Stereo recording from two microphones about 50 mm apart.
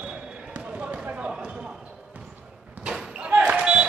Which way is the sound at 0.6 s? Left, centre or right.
Right.